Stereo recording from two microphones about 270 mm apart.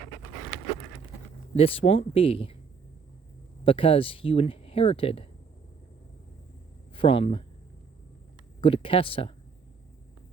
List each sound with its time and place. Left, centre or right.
1.5 s speech: left
3.6 s speech: centre
6.9 s speech: centre
8.6 s speech: centre